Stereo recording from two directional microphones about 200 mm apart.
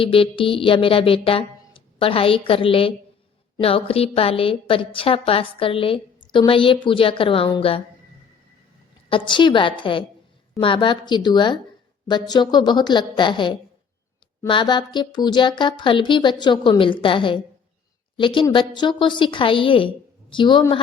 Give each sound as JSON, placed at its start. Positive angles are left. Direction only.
{"t": 0.0, "sound": "speech", "side_deg": 25}
{"t": 9.0, "sound": "speech", "side_deg": 25}